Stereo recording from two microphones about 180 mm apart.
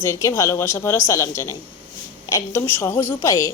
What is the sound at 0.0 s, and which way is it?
A woman's voice, 15° left (ahead or behind).